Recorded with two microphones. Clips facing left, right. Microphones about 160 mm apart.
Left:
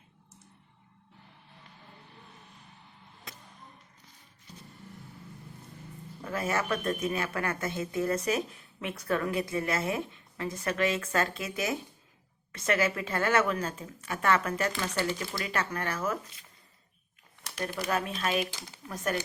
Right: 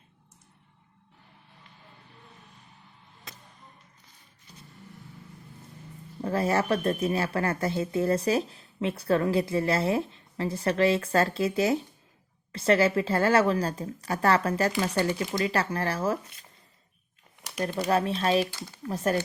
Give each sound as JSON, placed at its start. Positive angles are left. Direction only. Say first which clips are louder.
{"t": 6.2, "sound": "speech", "louder": "right 6 dB", "side_deg": -35}
{"t": 15.2, "sound": "speech", "louder": "right 7 dB", "side_deg": -20}
{"t": 15.4, "sound": "speech", "louder": "right 2 dB", "side_deg": -35}
{"t": 17.6, "sound": "speech", "louder": "right 6 dB", "side_deg": -30}